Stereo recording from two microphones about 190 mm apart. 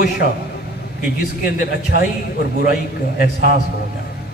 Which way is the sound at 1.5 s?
50° left (ahead or behind).